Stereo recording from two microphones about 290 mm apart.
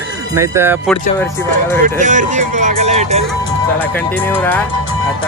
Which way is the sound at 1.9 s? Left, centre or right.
Right.